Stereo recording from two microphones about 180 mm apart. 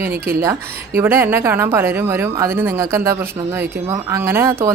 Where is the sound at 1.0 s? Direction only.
15° right (ahead or behind).